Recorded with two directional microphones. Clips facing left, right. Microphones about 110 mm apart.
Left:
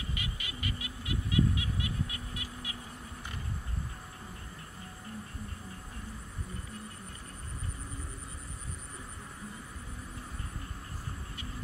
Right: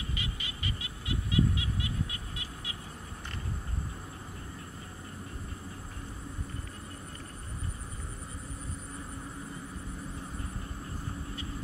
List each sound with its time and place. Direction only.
0.1 s vehicle: 30° right (ahead or behind)